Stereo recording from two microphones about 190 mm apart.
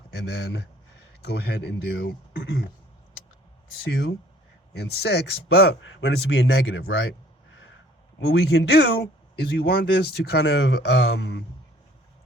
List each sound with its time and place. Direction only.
0.1 s speech: 60° left (ahead or behind)
4.7 s speech: 60° left (ahead or behind)
8.3 s speech: 60° left (ahead or behind)